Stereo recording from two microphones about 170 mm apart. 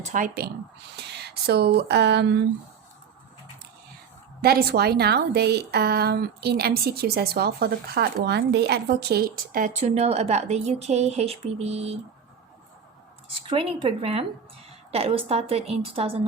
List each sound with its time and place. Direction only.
0.0 s a woman's voice: 50° right (ahead or behind)
1.0 s speech: 75° right (ahead or behind)
4.4 s a woman's voice: 65° right (ahead or behind); by 11.9 s 40° right (ahead or behind)
13.5 s a woman's voice: 30° right (ahead or behind)